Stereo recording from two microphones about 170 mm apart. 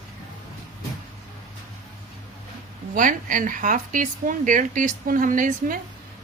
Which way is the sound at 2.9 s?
50° right (ahead or behind).